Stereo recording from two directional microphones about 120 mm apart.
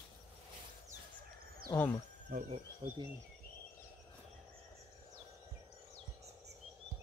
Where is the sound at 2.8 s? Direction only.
35° right (ahead or behind).